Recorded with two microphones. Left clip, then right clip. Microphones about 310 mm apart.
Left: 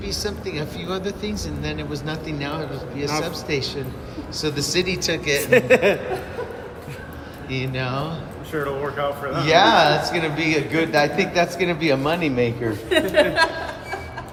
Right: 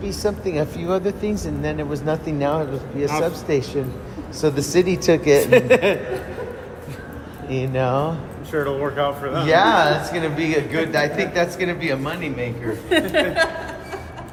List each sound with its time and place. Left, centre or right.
0.0 s speech: centre
7.5 s speech: centre
8.5 s speech: centre
9.4 s speech: centre